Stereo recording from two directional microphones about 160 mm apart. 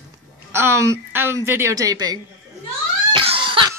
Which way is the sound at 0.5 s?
15° right (ahead or behind).